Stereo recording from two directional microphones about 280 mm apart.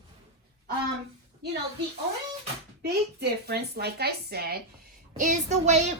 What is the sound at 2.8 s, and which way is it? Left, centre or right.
A woman's voice, right.